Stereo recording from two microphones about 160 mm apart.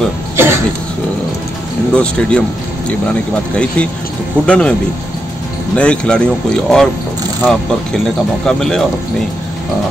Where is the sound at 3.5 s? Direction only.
5° left (ahead or behind).